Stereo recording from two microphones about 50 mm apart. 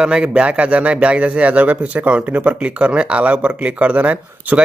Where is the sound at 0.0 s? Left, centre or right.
Centre.